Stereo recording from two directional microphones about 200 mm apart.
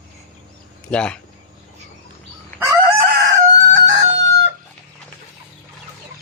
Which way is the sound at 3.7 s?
65° right (ahead or behind).